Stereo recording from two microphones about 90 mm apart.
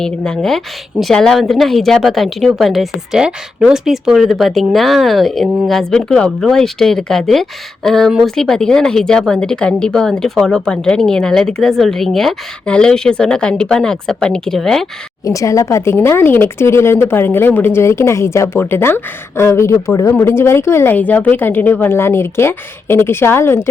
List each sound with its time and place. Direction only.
0.0 s a woman's voice: 5° left (ahead or behind)
15.2 s speech: 35° left (ahead or behind)